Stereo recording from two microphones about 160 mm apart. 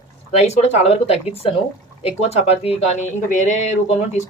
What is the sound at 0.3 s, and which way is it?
Speech, 40° left (ahead or behind).